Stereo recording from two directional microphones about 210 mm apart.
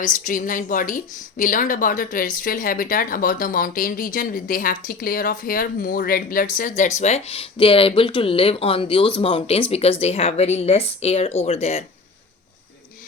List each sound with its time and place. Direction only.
0.0 s speech: 40° left (ahead or behind)